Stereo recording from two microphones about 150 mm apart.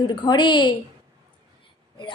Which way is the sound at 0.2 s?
30° left (ahead or behind).